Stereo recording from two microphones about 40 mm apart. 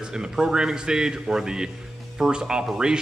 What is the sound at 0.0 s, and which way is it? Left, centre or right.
A man's voice, centre.